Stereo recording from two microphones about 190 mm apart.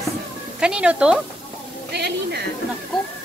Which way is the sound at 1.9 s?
60° right (ahead or behind).